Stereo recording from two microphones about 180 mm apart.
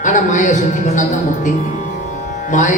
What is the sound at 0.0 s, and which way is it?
A man's voice, 45° left (ahead or behind).